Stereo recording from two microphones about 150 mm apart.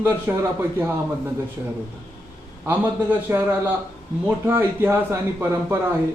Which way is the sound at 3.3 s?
10° right (ahead or behind).